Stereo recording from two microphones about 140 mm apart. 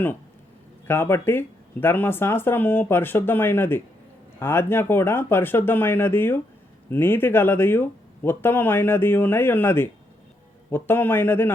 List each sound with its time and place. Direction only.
0.9 s speech: 15° left (ahead or behind)